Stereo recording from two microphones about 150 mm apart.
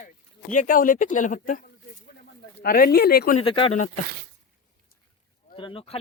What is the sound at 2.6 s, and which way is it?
Speech, 75° left (ahead or behind).